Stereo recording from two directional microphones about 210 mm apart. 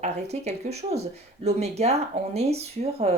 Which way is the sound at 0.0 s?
30° right (ahead or behind).